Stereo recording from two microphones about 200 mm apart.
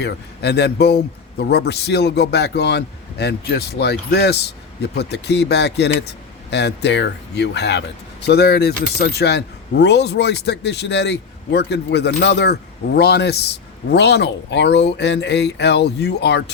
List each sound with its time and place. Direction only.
0.0 s a man's voice: 55° left (ahead or behind)